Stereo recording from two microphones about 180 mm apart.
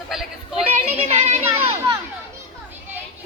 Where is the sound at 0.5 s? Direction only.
35° right (ahead or behind).